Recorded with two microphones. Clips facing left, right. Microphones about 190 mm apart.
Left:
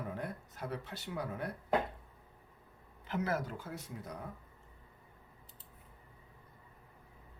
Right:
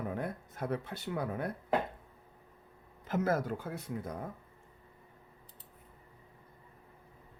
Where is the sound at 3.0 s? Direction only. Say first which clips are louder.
Right 5 dB; 45° right (ahead or behind).